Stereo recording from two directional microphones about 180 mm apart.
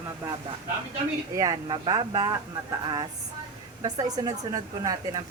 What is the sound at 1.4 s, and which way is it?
Speech, 20° right (ahead or behind).